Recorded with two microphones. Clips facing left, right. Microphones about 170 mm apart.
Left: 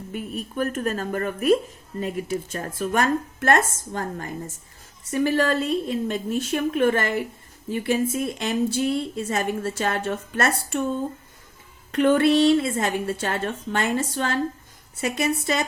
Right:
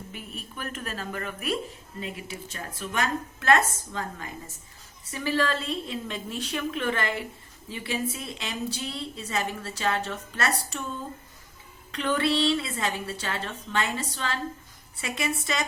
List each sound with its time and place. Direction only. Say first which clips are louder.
0.5 s a woman's voice: left 11 dB; 45° left (ahead or behind)